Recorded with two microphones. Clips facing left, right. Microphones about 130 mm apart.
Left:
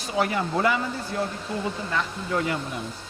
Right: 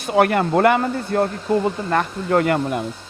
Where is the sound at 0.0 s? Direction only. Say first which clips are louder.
Right 8 dB; 60° right (ahead or behind).